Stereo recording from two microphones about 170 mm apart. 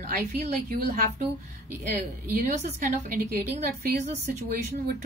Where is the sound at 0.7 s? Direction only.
60° right (ahead or behind).